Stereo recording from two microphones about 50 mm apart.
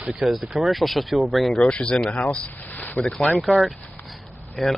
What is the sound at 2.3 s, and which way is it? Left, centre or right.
Boat, left.